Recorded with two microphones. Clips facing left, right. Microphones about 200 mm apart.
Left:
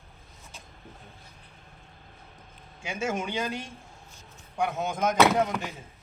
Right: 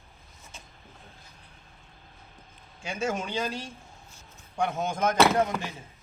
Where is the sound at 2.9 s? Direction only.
20° left (ahead or behind).